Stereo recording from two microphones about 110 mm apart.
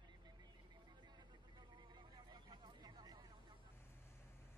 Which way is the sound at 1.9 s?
40° right (ahead or behind).